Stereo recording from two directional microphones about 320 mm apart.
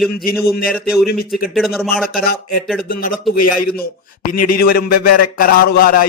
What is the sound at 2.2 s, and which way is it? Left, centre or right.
A man's voice, left.